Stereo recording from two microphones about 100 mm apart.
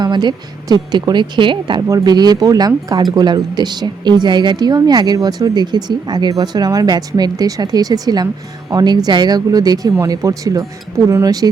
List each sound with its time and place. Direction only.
0.0 s speech: 45° right (ahead or behind)